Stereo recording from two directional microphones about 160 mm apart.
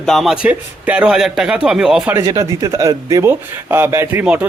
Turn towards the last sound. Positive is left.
turn(degrees=-10)  # may be behind; listen again after turning